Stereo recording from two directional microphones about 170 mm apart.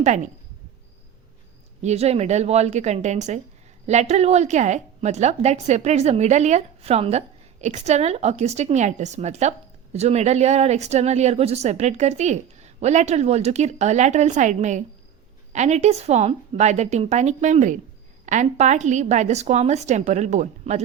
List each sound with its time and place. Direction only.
0.0 s a woman's voice: 45° right (ahead or behind)
1.8 s a woman's voice: 40° right (ahead or behind)